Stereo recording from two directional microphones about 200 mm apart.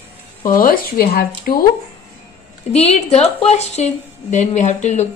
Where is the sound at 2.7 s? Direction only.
30° left (ahead or behind).